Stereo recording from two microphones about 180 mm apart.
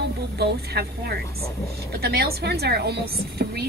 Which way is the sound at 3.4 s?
60° right (ahead or behind).